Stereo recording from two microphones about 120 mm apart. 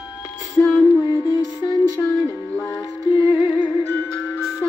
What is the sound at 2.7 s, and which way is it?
Music, 30° left (ahead or behind).